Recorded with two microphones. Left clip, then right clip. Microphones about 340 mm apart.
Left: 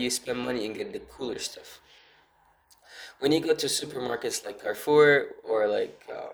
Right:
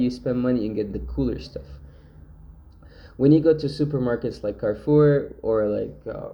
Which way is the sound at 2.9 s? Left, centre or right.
Left.